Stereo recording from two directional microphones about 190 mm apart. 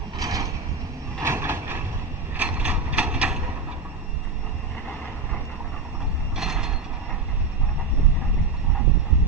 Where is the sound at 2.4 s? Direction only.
5° right (ahead or behind).